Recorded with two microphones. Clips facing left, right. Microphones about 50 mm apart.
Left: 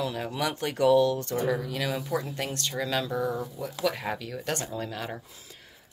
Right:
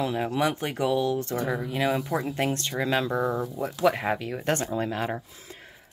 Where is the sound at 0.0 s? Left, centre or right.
Right.